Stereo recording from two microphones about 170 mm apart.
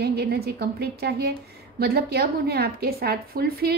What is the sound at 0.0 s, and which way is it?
A woman's voice, 70° right (ahead or behind).